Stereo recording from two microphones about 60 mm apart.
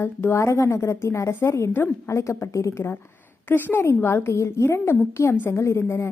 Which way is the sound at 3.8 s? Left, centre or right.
Left.